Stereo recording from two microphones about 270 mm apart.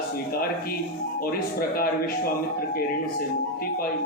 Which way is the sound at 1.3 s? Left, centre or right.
Left.